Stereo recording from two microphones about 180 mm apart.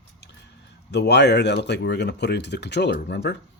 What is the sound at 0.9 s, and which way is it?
Speech, 70° left (ahead or behind).